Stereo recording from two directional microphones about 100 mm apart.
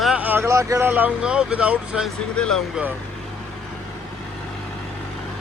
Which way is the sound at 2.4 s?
5° left (ahead or behind).